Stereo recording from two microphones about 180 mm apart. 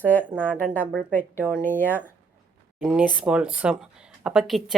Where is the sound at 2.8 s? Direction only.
5° right (ahead or behind).